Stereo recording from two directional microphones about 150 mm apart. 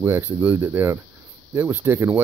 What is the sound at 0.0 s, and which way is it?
Speech, 15° right (ahead or behind).